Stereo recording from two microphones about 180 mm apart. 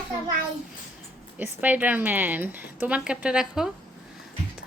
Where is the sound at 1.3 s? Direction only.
10° right (ahead or behind).